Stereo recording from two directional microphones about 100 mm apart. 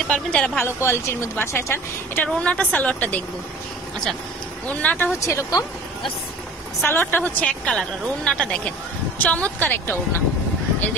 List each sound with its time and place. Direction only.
0.1 s a woman's voice: 10° left (ahead or behind)
0.8 s speech: 25° left (ahead or behind)
2.2 s a woman's voice: 10° left (ahead or behind)
4.6 s a woman's voice: 15° left (ahead or behind)
5.2 s speech: 35° left (ahead or behind)
6.8 s a woman's voice: 20° left (ahead or behind)